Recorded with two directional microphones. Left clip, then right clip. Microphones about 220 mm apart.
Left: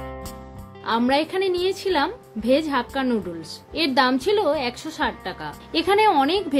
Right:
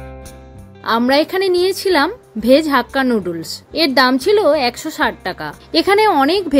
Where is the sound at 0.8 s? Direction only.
30° right (ahead or behind).